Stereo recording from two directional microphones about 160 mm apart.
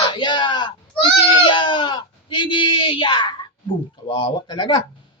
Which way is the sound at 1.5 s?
30° left (ahead or behind).